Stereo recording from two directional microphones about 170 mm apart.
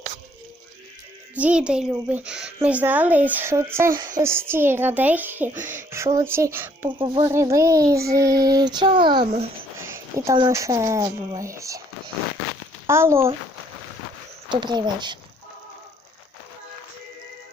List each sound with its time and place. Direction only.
1.4 s a woman's voice: 5° right (ahead or behind)
5.5 s speech: 50° right (ahead or behind)
5.9 s a woman's voice: 20° right (ahead or behind)
7.0 s speech: 30° right (ahead or behind)
7.3 s child singing: 15° right (ahead or behind)
9.7 s a woman's voice: 15° right (ahead or behind)
14.5 s child singing: 25° right (ahead or behind)